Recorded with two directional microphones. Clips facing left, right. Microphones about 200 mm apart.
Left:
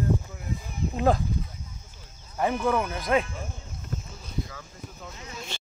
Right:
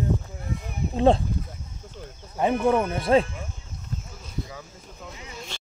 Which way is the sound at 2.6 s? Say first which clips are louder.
Right 4 dB; 25° right (ahead or behind).